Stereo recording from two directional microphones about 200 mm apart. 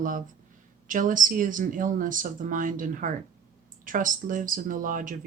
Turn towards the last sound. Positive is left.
turn(degrees=-40)  # may be behind; listen again after turning